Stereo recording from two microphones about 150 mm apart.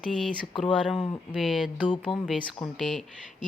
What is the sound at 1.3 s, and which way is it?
Speech, centre (ahead or behind).